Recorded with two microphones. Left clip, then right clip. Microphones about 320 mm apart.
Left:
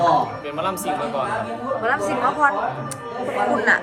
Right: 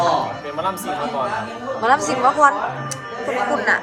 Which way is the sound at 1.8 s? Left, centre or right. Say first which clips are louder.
Right 5 dB; centre.